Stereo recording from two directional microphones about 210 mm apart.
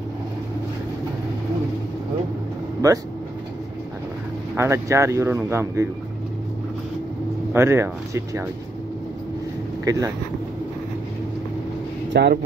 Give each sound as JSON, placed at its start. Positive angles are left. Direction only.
{"t": 2.8, "sound": "speech", "side_deg": -15}
{"t": 4.6, "sound": "speech", "side_deg": -10}
{"t": 7.5, "sound": "speech", "side_deg": -10}
{"t": 9.8, "sound": "speech", "side_deg": -15}
{"t": 12.1, "sound": "speech", "side_deg": -50}